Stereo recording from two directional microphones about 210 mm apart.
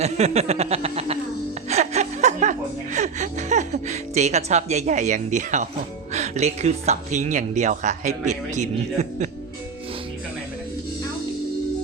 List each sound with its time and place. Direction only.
0.0 s speech: 30° right (ahead or behind)